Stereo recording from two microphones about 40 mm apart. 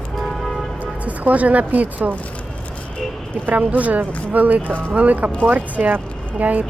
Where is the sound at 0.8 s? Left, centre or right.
Right.